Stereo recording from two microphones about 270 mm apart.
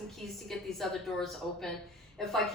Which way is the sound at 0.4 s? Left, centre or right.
Centre.